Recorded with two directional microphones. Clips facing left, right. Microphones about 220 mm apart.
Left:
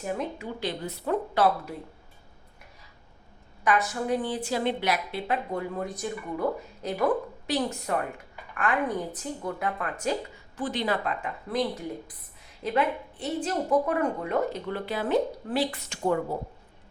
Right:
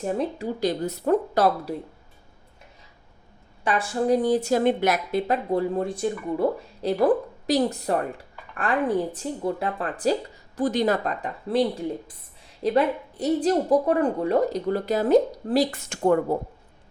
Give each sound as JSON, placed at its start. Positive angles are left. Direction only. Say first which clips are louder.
{"t": 0.0, "sound": "a woman's voice", "louder": "right 5 dB", "side_deg": -35}
{"t": 3.6, "sound": "a woman's voice", "louder": "right 2 dB", "side_deg": -30}